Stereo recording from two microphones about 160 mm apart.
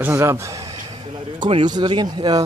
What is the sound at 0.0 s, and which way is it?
A man's voice, 15° right (ahead or behind).